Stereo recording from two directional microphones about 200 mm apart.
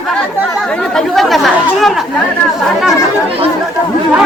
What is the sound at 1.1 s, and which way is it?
Speech, centre (ahead or behind).